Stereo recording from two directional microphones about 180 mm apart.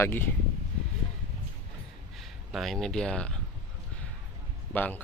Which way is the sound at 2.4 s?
Centre (ahead or behind).